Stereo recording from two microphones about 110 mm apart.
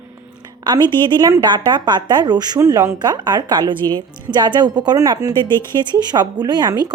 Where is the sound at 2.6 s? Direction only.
30° right (ahead or behind).